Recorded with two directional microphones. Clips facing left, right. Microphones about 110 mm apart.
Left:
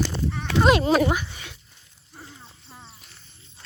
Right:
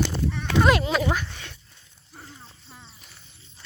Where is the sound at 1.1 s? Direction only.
5° left (ahead or behind).